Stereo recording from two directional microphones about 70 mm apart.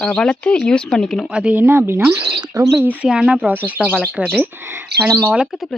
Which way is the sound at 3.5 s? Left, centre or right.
Right.